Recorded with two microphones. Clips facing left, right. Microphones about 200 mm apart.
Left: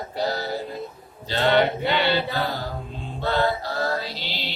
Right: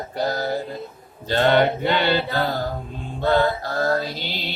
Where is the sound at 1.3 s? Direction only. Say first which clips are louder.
Right 2 dB; 50° right (ahead or behind).